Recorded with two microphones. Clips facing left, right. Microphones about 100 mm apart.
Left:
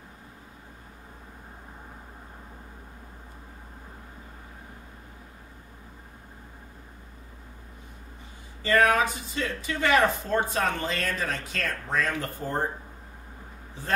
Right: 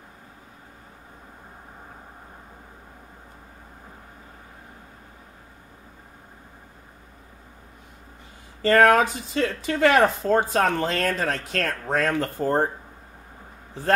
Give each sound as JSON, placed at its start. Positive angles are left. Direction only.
{"t": 8.6, "sound": "speech", "side_deg": -65}